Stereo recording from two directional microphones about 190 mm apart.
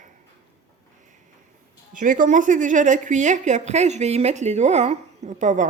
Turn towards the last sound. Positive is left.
turn(degrees=-40)  # may be behind; listen again after turning